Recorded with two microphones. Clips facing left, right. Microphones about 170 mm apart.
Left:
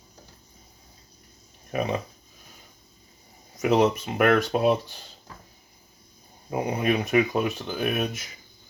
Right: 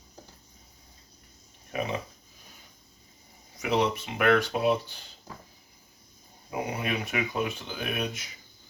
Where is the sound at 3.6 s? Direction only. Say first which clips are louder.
Left 6 dB; 45° left (ahead or behind).